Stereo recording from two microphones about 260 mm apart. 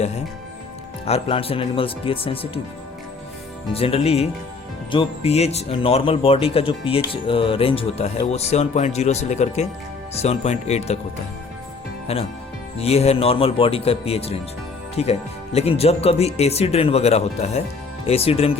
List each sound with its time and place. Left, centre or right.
1.0 s speech: left
3.7 s speech: left
12.1 s speech: left